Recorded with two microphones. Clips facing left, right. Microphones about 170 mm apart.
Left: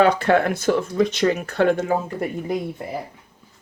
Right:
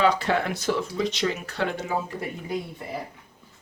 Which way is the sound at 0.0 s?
55° left (ahead or behind).